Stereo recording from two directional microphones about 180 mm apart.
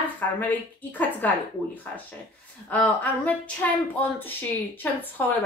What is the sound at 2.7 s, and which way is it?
A woman's voice, 10° left (ahead or behind).